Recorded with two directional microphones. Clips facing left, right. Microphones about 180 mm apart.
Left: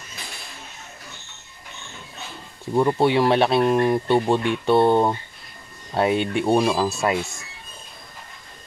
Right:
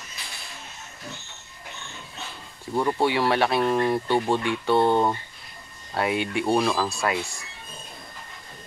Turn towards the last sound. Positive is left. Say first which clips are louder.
# left 4 dB
turn(degrees=20)  # may be behind; listen again after turning